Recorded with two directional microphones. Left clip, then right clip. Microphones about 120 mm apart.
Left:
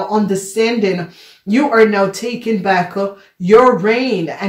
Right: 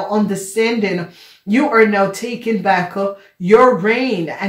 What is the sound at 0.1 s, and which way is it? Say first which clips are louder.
Speech: left 2 dB; 25° left (ahead or behind).